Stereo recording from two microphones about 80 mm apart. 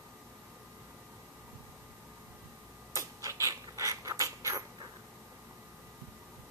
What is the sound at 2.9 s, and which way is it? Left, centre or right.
Mechanisms, right.